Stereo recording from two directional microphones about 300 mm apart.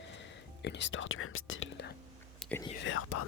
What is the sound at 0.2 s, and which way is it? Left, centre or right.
Whispering, left.